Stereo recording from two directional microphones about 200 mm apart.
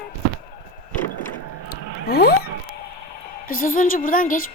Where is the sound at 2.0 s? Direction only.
55° left (ahead or behind).